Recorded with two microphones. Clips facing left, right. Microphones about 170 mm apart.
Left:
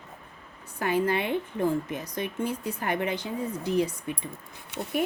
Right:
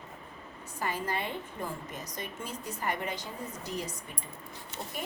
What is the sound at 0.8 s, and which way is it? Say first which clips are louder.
Speech: left 8 dB; 65° left (ahead or behind).